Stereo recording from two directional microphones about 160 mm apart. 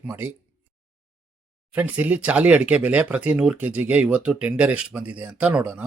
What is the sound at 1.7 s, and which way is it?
Speech, 10° right (ahead or behind).